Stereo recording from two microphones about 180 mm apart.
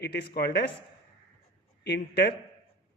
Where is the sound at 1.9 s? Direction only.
70° left (ahead or behind).